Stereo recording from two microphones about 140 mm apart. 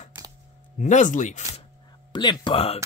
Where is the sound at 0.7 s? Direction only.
60° left (ahead or behind).